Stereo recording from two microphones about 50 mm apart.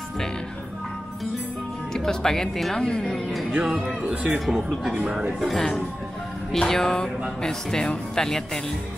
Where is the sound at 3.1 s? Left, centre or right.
Centre.